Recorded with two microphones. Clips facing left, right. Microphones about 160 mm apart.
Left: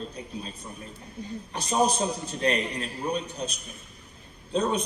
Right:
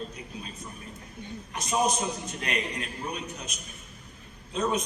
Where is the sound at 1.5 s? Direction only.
30° left (ahead or behind).